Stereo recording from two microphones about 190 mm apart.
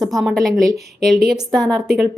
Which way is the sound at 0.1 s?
Centre (ahead or behind).